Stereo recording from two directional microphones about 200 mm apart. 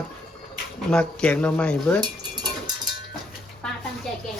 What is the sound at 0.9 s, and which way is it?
Speech, 5° left (ahead or behind).